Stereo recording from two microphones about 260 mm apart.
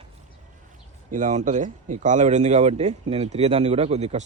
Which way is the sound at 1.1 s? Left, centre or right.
Right.